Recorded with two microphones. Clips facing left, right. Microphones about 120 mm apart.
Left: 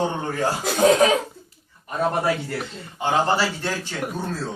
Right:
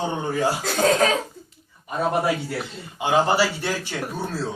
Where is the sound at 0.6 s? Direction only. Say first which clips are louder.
Left 5 dB; 15° left (ahead or behind).